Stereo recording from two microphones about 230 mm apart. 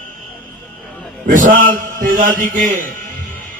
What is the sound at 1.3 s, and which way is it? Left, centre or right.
A man's voice, right.